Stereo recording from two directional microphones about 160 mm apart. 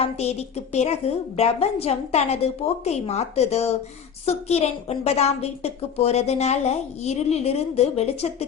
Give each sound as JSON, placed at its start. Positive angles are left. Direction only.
{"t": 0.0, "sound": "a woman's voice", "side_deg": 40}